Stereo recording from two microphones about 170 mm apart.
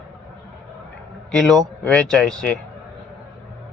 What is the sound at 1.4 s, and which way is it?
Speech, 5° left (ahead or behind).